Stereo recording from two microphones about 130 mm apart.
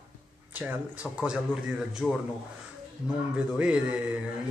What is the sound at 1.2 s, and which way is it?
Speech, 5° right (ahead or behind).